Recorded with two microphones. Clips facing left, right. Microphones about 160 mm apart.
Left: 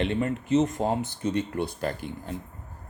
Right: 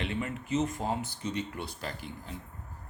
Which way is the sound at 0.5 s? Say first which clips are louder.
Left 6 dB; 45° left (ahead or behind).